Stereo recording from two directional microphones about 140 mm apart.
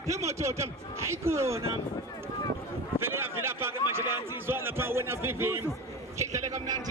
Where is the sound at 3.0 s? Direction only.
15° right (ahead or behind).